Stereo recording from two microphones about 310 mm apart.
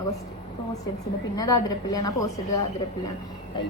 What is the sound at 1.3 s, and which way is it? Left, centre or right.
Speech, centre.